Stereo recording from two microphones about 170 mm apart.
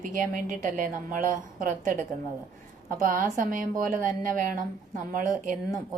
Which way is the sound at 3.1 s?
55° right (ahead or behind).